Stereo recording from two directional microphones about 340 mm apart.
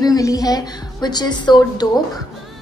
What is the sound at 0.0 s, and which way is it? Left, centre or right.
A woman's voice, centre.